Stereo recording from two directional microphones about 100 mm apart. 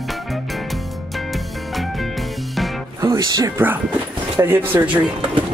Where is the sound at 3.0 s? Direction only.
40° right (ahead or behind).